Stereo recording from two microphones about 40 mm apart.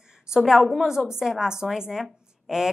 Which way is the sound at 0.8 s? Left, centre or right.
Centre.